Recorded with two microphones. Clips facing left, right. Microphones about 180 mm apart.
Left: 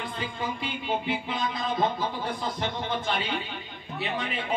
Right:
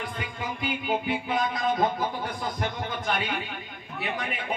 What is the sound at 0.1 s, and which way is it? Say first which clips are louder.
A man's voice: left 2 dB; 30° left (ahead or behind).